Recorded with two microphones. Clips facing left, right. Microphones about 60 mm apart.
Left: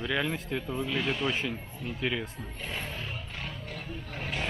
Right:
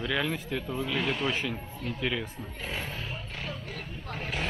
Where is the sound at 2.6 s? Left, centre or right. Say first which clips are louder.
Right 1 dB; centre.